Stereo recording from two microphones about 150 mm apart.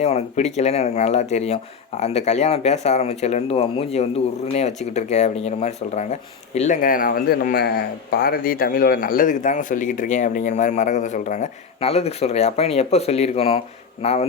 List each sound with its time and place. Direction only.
0.0 s speech: 45° left (ahead or behind)
6.8 s a man's voice: 70° left (ahead or behind); by 14.3 s 45° left (ahead or behind)